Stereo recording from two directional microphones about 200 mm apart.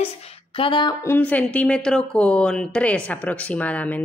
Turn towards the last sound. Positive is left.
turn(degrees=10)  # may be behind; listen again after turning